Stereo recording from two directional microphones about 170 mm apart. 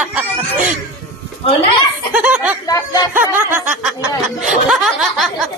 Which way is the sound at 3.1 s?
15° right (ahead or behind).